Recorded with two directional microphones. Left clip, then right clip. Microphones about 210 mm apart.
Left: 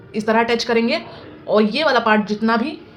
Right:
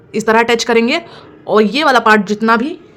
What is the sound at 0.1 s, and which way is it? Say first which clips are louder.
A woman's voice: right 6 dB; 50° right (ahead or behind).